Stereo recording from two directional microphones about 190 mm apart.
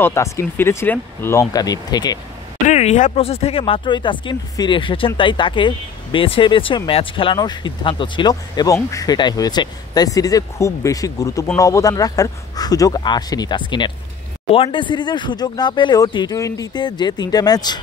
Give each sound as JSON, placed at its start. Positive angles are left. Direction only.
{"t": 0.0, "sound": "speech", "side_deg": 15}
{"t": 2.7, "sound": "speech", "side_deg": 35}